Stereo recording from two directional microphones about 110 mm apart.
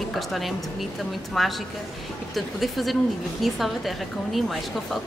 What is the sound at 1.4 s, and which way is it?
A woman's voice, centre (ahead or behind).